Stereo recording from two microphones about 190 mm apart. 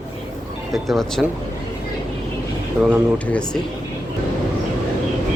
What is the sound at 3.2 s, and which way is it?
Speech, 5° left (ahead or behind).